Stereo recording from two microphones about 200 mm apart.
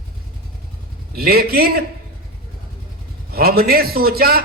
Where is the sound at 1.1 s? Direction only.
50° right (ahead or behind).